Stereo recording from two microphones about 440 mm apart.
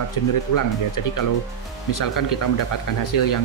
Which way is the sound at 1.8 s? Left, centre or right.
Left.